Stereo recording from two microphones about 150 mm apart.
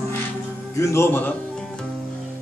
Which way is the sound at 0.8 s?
20° left (ahead or behind).